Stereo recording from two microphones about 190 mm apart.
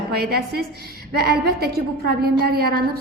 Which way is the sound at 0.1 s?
55° right (ahead or behind).